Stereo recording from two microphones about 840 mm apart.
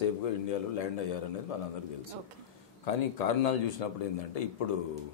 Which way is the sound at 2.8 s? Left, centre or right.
Left.